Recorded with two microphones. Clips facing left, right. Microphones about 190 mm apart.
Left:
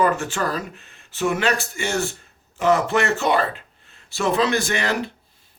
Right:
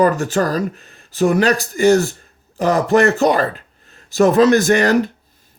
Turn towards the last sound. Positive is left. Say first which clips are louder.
# right 10 dB
turn(degrees=-45)  # may be behind; listen again after turning